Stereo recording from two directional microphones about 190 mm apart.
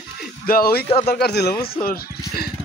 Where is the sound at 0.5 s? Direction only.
50° left (ahead or behind).